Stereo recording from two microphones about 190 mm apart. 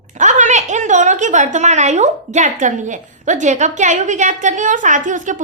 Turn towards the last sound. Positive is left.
turn(degrees=-40)  # may be behind; listen again after turning